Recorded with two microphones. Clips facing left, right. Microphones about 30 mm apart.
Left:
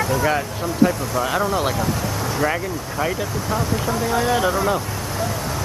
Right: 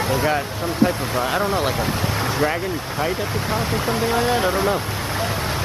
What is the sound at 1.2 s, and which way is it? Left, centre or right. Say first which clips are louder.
Speech: even; right.